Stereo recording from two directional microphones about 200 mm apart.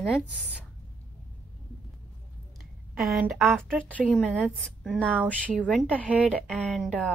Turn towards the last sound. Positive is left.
turn(degrees=0)  # may be behind; listen again after turning